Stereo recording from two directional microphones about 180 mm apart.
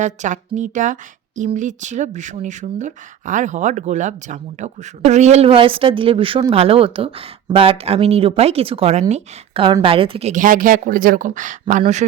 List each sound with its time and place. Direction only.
0.0 s speech: 40° right (ahead or behind)